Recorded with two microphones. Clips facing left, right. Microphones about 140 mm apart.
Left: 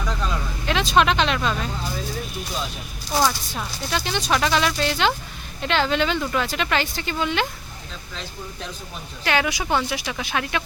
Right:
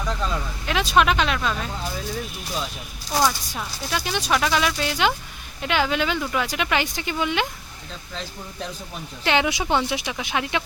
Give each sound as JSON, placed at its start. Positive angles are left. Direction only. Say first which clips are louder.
{"t": 0.6, "sound": "speech", "louder": "left 1 dB", "side_deg": -5}
{"t": 3.1, "sound": "speech", "louder": "even", "side_deg": 0}
{"t": 9.2, "sound": "speech", "louder": "right 1 dB", "side_deg": -20}